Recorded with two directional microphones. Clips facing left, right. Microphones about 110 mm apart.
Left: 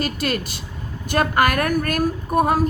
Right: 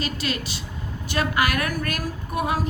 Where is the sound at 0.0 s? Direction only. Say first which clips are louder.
Left 4 dB; 50° left (ahead or behind).